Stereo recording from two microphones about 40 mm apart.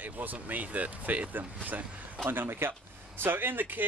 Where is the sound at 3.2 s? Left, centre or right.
Right.